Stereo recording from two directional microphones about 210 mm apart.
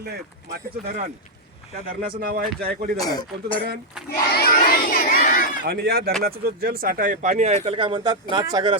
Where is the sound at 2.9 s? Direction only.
15° left (ahead or behind).